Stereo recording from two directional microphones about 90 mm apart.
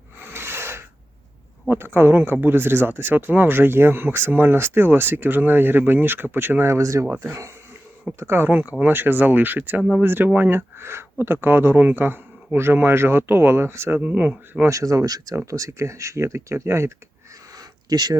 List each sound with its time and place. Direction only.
0.2 s snort: 25° right (ahead or behind)
1.7 s speech: 25° right (ahead or behind)
14.0 s speech: 15° right (ahead or behind)
14.7 s speech: 35° right (ahead or behind)
17.6 s a sound: 45° right (ahead or behind)